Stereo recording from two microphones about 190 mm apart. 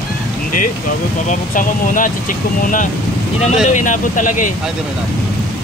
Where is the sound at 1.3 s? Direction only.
45° left (ahead or behind).